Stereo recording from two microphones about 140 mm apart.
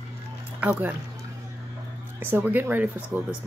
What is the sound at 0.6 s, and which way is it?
Speech, 10° right (ahead or behind).